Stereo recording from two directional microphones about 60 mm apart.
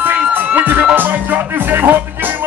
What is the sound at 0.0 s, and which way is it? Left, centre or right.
Music, right.